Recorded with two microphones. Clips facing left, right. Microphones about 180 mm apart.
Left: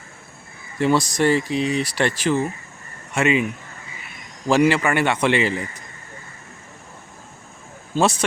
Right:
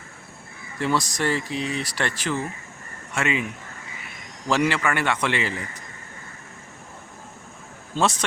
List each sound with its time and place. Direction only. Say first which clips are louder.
0.8 s speech: left 6 dB; 20° left (ahead or behind)
4.4 s a man's voice: left 5 dB; 10° left (ahead or behind)
7.9 s a man's voice: left 4 dB; 10° left (ahead or behind)